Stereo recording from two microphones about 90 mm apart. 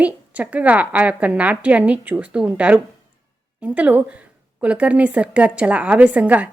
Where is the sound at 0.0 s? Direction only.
15° right (ahead or behind).